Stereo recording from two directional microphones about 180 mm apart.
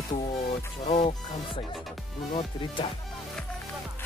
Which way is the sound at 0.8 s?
35° left (ahead or behind).